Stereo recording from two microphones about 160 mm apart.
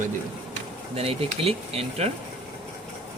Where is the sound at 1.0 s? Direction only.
40° right (ahead or behind).